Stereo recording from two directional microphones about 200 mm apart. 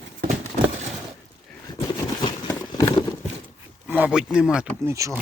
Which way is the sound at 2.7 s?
20° left (ahead or behind).